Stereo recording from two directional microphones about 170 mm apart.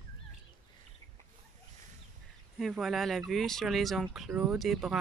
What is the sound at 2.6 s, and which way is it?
Speech, centre (ahead or behind).